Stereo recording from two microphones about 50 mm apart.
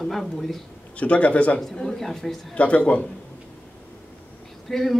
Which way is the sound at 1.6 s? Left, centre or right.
Centre.